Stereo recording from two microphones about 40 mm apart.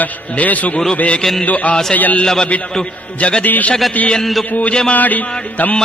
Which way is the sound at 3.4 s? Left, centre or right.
Left.